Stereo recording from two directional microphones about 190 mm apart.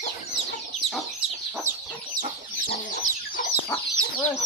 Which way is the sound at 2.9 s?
40° left (ahead or behind).